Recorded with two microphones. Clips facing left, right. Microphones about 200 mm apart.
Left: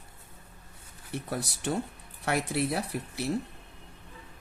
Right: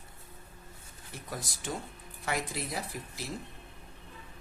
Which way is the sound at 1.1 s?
65° left (ahead or behind).